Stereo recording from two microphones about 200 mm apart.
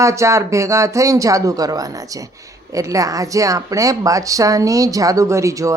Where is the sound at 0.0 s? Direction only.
15° right (ahead or behind).